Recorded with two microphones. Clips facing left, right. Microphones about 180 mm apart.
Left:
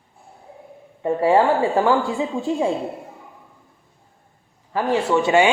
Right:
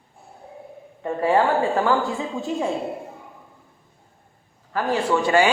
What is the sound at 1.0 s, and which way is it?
Speech, 20° left (ahead or behind).